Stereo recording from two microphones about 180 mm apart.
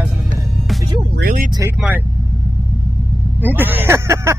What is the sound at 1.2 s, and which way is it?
Speech, 50° right (ahead or behind).